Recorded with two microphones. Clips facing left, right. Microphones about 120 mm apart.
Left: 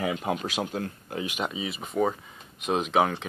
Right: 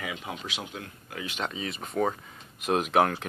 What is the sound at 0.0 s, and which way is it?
Speech, 45° left (ahead or behind).